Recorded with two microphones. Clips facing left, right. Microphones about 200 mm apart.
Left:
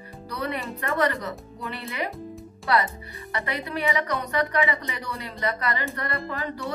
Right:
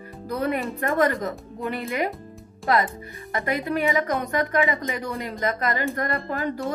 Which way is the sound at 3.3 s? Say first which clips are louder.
Right 5 dB; 45° right (ahead or behind).